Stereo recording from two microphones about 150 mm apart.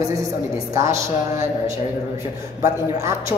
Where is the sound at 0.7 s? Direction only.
20° right (ahead or behind).